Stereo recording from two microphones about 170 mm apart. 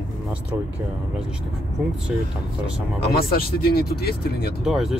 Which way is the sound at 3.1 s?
65° left (ahead or behind).